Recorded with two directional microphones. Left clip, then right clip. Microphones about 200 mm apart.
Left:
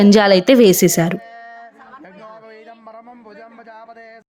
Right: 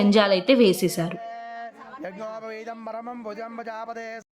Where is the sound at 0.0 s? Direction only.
35° left (ahead or behind).